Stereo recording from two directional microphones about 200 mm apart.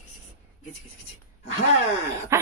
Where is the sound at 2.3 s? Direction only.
15° right (ahead or behind).